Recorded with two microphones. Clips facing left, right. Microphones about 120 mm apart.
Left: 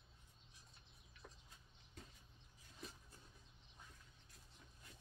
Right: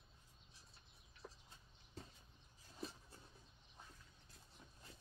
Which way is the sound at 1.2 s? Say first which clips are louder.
Right 4 dB; 30° right (ahead or behind).